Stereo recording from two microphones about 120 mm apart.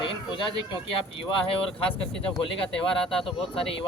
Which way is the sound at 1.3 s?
50° left (ahead or behind).